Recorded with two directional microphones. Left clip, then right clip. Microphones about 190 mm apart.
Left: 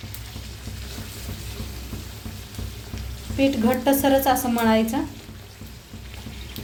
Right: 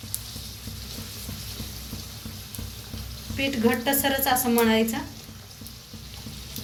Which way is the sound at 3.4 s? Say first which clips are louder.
Left 3 dB; 45° left (ahead or behind).